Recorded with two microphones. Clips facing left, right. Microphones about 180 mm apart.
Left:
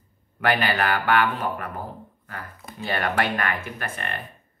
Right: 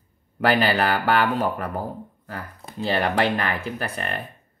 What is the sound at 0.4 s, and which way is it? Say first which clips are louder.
Speech: right 3 dB; 35° right (ahead or behind).